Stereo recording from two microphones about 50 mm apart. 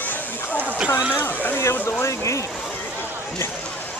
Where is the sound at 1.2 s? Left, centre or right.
Left.